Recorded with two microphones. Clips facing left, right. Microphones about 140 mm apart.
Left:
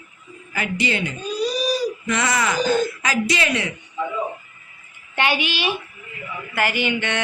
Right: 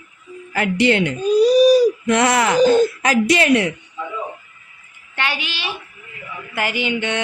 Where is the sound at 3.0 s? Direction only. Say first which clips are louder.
Right 6 dB; 55° right (ahead or behind).